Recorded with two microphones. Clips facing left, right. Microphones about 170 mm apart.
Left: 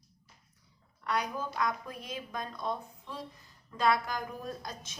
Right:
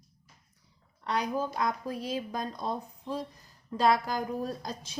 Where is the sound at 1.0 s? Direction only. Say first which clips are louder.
Right 3 dB; 30° right (ahead or behind).